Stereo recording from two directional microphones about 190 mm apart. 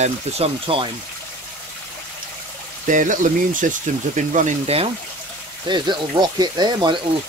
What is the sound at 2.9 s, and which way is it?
Speech, 45° right (ahead or behind).